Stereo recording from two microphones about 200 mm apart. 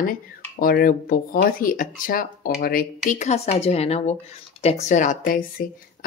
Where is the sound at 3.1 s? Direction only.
35° left (ahead or behind).